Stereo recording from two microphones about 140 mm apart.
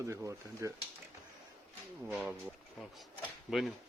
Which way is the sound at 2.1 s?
Centre (ahead or behind).